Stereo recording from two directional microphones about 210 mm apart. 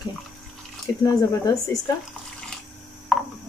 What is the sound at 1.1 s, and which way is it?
Speech, 15° left (ahead or behind).